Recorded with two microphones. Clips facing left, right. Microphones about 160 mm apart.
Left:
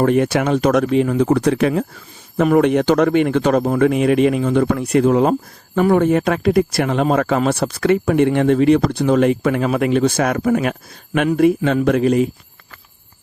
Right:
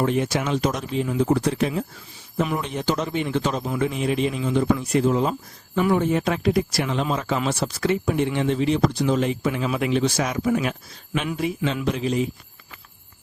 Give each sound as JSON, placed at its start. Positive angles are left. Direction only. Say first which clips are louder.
{"t": 0.0, "sound": "speech", "louder": "left 7 dB", "side_deg": 60}